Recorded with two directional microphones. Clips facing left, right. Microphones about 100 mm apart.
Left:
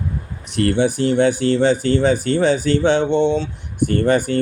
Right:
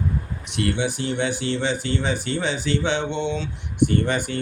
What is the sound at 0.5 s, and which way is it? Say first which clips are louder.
Speech: left 7 dB; 40° left (ahead or behind).